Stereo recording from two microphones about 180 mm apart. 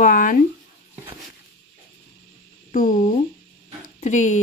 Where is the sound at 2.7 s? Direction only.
45° left (ahead or behind).